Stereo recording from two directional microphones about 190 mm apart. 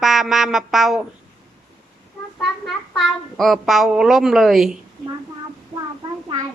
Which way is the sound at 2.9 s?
Centre (ahead or behind).